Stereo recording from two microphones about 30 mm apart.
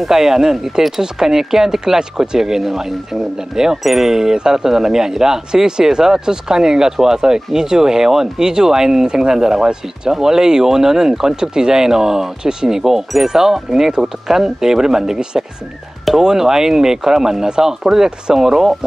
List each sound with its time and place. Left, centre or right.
0.1 s speech: centre